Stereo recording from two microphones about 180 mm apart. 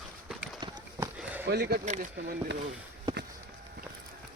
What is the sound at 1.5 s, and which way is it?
Speech, 65° right (ahead or behind).